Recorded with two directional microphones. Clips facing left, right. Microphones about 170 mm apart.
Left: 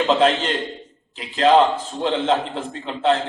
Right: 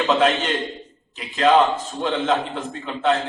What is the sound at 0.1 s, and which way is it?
A man's voice, 30° left (ahead or behind).